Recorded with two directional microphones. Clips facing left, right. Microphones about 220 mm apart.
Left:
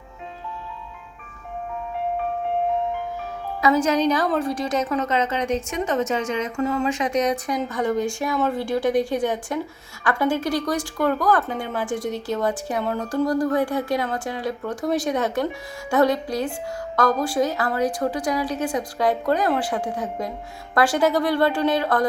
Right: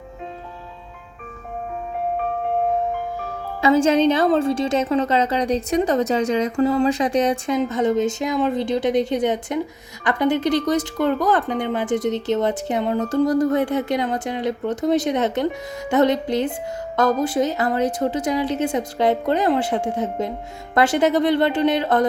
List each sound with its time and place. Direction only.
3.6 s a woman's voice: 25° right (ahead or behind)